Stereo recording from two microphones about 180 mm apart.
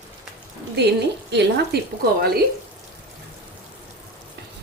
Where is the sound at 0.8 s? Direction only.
70° right (ahead or behind).